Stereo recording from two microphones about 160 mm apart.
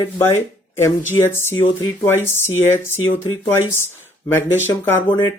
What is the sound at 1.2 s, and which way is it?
Speech, 15° left (ahead or behind).